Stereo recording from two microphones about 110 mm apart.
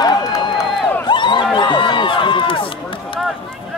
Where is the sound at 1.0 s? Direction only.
45° left (ahead or behind).